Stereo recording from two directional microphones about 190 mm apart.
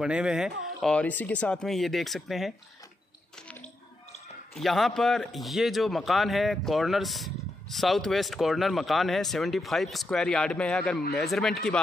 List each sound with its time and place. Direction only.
0.0 s a man's voice: 5° right (ahead or behind)
4.6 s a man's voice: centre (ahead or behind)